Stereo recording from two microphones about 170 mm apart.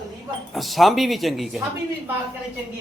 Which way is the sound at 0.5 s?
Centre (ahead or behind).